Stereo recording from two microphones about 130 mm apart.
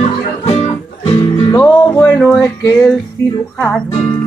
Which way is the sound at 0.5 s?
50° left (ahead or behind).